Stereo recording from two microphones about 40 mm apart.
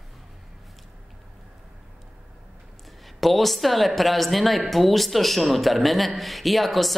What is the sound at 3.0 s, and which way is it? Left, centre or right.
A woman's voice, centre.